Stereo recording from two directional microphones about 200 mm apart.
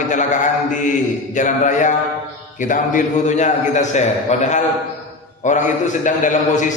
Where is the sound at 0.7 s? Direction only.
40° left (ahead or behind).